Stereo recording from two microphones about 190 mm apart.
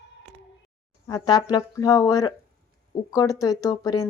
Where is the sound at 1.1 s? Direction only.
20° left (ahead or behind).